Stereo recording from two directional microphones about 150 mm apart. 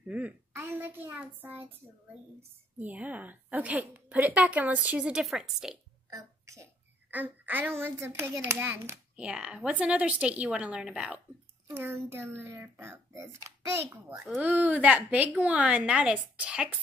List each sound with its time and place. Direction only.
0.1 s a sound: 10° right (ahead or behind)
2.8 s a woman's voice: 10° right (ahead or behind)
6.0 s a child's voice: 20° right (ahead or behind)
14.2 s a woman's voice: 5° right (ahead or behind)